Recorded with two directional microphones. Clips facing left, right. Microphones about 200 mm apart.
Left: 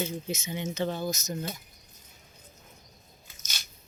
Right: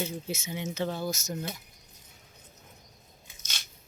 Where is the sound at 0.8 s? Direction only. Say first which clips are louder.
Left 1 dB; 15° left (ahead or behind).